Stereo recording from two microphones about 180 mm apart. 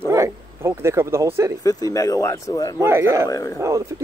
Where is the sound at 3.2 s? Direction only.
20° left (ahead or behind).